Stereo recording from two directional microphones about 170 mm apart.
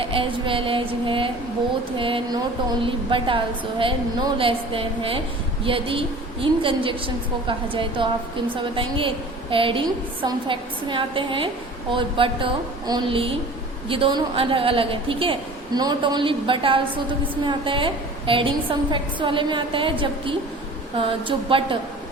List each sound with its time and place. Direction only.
0.0 s a woman's voice: 30° right (ahead or behind)